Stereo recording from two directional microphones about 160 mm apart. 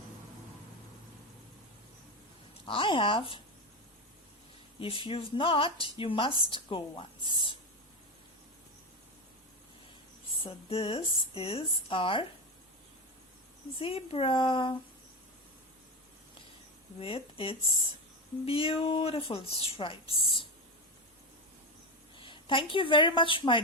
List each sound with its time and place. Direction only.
2.6 s speech: 30° left (ahead or behind)
4.8 s speech: 35° left (ahead or behind)
10.4 s speech: 35° left (ahead or behind)
13.7 s speech: 35° left (ahead or behind)
17.0 s speech: 35° left (ahead or behind)
22.2 s a woman's voice: 30° left (ahead or behind)